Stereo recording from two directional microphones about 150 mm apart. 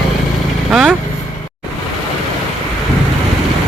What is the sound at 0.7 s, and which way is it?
Vehicle, 5° right (ahead or behind).